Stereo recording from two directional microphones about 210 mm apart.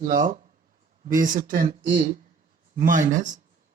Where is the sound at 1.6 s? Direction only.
20° right (ahead or behind).